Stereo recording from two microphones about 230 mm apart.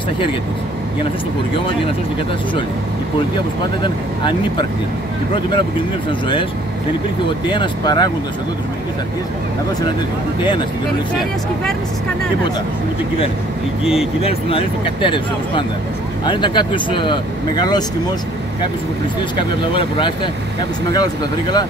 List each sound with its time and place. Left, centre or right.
3.8 s speech: centre
7.4 s speech: centre
14.2 s speech: left
19.7 s speech: left